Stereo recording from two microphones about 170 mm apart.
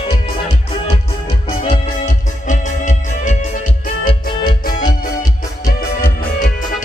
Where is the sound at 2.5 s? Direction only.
45° left (ahead or behind).